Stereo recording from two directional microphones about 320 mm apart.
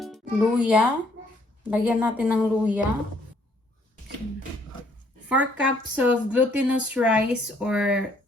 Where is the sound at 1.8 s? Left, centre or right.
Centre.